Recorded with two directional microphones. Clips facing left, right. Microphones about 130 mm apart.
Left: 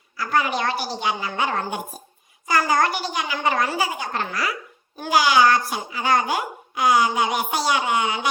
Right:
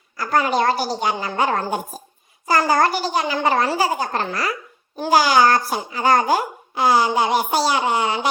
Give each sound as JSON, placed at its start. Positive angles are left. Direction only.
{"t": 0.2, "sound": "a child's voice", "side_deg": -40}